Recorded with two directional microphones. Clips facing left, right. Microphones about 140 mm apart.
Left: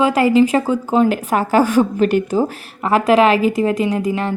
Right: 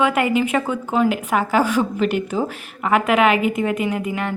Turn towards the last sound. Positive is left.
turn(degrees=30)  # may be behind; listen again after turning